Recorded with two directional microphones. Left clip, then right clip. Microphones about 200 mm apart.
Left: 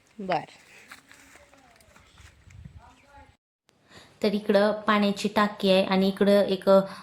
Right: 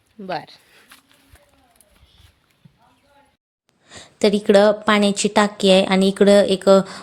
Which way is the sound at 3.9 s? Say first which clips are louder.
Right 9 dB; 45° right (ahead or behind).